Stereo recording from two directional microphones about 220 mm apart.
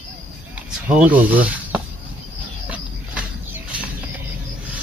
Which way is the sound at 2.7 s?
5° right (ahead or behind).